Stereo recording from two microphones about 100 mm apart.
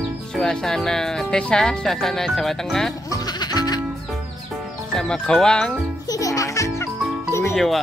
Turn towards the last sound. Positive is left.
turn(degrees=0)  # may be behind; listen again after turning